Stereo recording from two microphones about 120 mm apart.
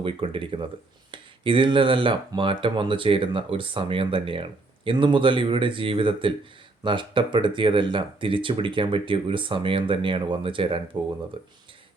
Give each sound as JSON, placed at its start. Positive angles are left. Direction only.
{"t": 0.0, "sound": "speech", "side_deg": -45}